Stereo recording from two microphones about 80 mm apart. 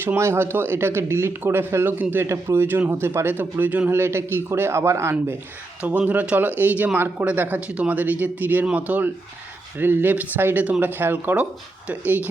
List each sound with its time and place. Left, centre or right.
0.0 s a man's voice: right
5.8 s speech: centre